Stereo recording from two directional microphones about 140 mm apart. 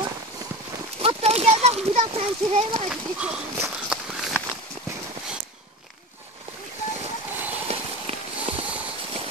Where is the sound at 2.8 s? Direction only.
5° right (ahead or behind).